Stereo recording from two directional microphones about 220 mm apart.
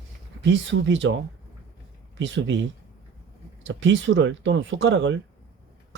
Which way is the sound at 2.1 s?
55° right (ahead or behind).